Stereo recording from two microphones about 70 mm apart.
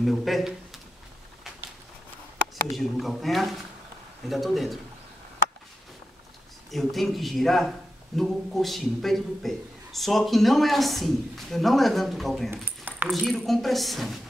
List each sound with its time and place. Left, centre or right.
0.0 s a man's voice: centre
2.8 s a man's voice: centre
6.7 s a man's voice: centre
12.6 s a sound: right
13.3 s a man's voice: centre